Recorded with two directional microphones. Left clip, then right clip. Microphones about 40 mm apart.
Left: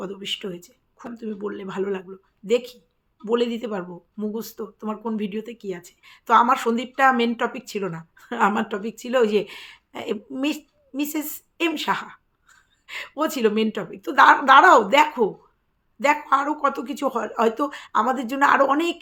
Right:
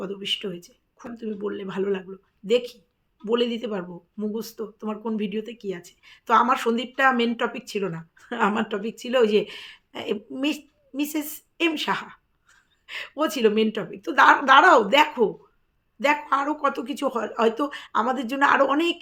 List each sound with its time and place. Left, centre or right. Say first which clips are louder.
0.0 s speech: right 1 dB; left
3.2 s speech: left 1 dB; left